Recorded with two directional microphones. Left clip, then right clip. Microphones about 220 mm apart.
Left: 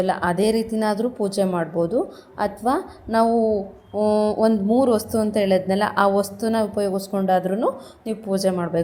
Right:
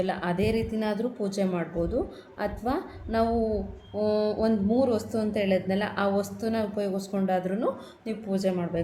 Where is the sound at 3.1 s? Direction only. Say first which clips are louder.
Left 8 dB; 20° left (ahead or behind).